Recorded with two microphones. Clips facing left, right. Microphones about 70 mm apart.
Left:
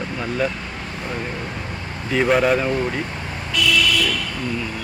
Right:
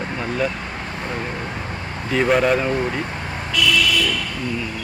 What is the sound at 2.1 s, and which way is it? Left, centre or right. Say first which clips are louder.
Speech: even; centre.